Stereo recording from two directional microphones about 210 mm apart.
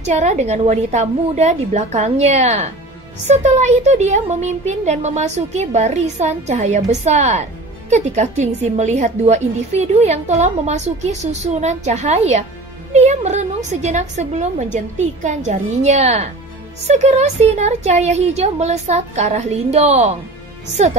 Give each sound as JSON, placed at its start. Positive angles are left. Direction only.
{"t": 0.0, "sound": "a woman's voice", "side_deg": -35}